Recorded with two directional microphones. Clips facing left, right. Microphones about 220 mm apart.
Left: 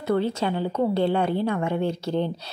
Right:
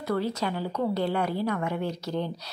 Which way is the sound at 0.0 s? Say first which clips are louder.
Left 4 dB; 25° left (ahead or behind).